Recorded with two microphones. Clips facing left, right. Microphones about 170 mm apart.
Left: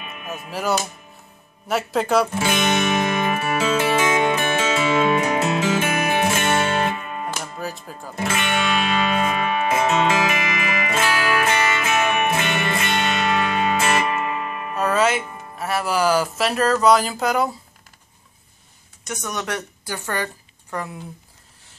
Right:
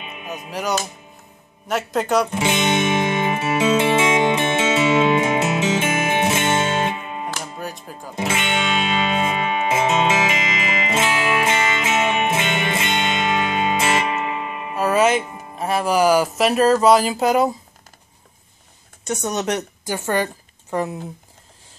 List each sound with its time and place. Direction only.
0.0 s music: 20° right (ahead or behind)
0.5 s speech: 5° left (ahead or behind)
2.3 s music: 20° right (ahead or behind)
7.4 s speech: centre (ahead or behind)
8.2 s music: 20° right (ahead or behind)
15.1 s speech: 20° right (ahead or behind)
19.0 s a woman's voice: 30° right (ahead or behind)